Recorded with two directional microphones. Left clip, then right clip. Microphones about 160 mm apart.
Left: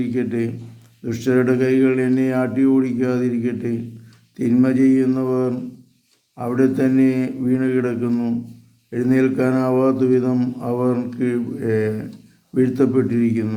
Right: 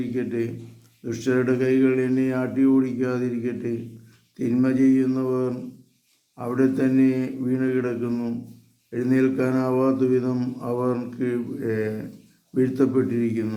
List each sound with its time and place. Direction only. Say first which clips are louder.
0.0 s speech: left 4 dB; 20° left (ahead or behind)